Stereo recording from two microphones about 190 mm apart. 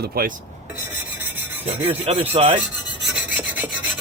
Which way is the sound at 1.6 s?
30° right (ahead or behind).